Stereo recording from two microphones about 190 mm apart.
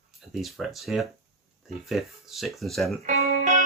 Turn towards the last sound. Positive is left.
turn(degrees=-35)  # may be behind; listen again after turning